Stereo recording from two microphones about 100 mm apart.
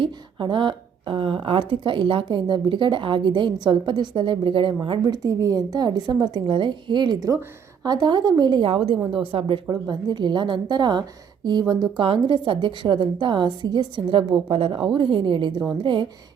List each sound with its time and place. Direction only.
0.0 s a woman's voice: 55° right (ahead or behind)
5.0 s a woman's voice: 35° right (ahead or behind)
8.6 s a woman's voice: 65° right (ahead or behind)
9.6 s a woman's voice: 45° right (ahead or behind)